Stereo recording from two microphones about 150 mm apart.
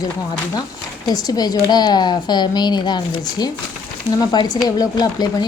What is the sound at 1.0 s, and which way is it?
A woman's voice, 25° left (ahead or behind).